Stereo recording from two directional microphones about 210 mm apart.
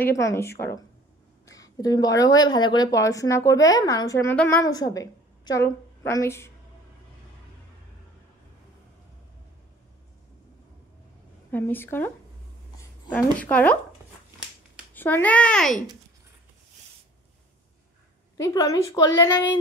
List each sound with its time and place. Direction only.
0.0 s speech: 15° left (ahead or behind)
11.5 s speech: 10° left (ahead or behind)
13.1 s speech: 5° left (ahead or behind)
15.0 s speech: 10° left (ahead or behind)
18.4 s speech: 15° left (ahead or behind)